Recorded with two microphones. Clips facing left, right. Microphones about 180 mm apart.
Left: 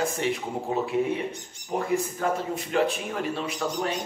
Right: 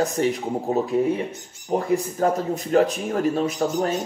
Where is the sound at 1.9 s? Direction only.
40° right (ahead or behind).